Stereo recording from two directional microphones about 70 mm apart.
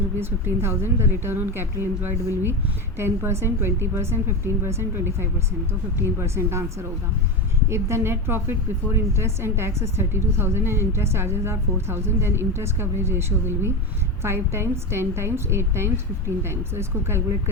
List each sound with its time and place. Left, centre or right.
0.2 s a woman's voice: right
7.7 s a woman's voice: right